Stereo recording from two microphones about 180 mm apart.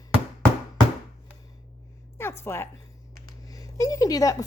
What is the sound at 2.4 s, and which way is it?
Speech, 15° left (ahead or behind).